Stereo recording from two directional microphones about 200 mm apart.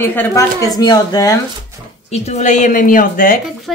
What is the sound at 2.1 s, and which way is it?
A woman's voice, 35° left (ahead or behind).